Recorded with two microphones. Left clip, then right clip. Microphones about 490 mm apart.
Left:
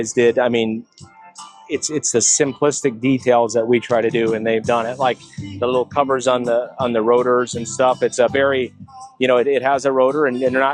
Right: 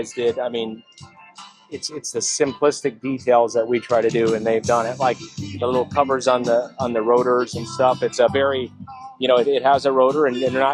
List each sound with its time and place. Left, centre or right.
0.2 s speech: left
1.8 s speech: left
9.1 s speech: left; by 10.7 s centre